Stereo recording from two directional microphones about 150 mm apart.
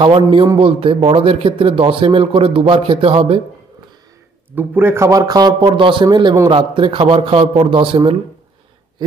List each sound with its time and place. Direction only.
0.6 s speech: 35° right (ahead or behind)
4.5 s a man's voice: 15° right (ahead or behind); by 8.2 s 35° right (ahead or behind)